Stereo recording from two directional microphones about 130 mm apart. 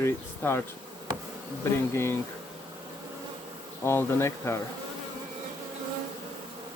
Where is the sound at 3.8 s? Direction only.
20° left (ahead or behind).